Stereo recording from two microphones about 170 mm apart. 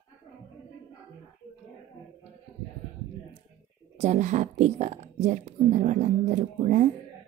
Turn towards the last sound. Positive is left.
turn(degrees=-45)  # may be behind; listen again after turning